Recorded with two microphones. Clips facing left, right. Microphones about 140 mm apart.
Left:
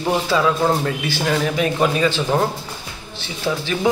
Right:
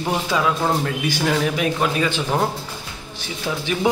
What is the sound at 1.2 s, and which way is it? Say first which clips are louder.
Speech: left 1 dB; 5° right (ahead or behind).